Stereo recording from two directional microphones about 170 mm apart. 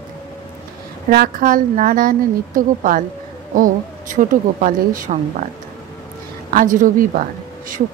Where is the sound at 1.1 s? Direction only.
60° right (ahead or behind).